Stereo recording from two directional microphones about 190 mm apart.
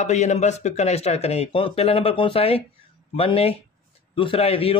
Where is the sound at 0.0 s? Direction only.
40° left (ahead or behind).